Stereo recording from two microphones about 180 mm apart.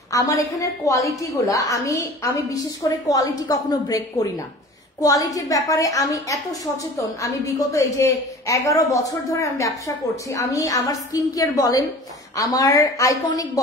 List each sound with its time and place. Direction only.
0.1 s a woman's voice: 20° left (ahead or behind)